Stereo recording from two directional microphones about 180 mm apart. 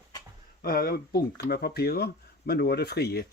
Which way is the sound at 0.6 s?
55° left (ahead or behind).